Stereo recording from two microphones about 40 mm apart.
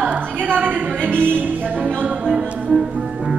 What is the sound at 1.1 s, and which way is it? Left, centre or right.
Speech, right.